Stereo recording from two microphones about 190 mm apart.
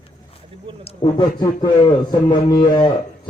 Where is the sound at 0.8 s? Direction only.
30° left (ahead or behind).